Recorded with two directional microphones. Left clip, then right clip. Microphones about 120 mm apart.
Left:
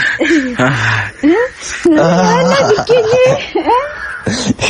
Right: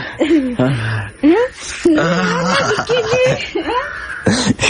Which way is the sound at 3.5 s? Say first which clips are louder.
Left 6 dB; 70° left (ahead or behind).